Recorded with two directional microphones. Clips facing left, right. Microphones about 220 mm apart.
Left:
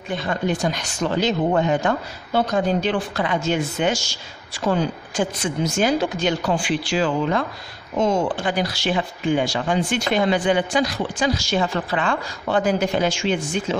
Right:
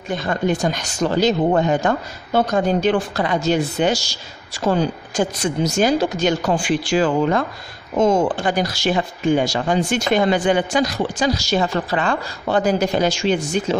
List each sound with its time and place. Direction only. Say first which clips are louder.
0.1 s speech: right 3 dB; 45° right (ahead or behind)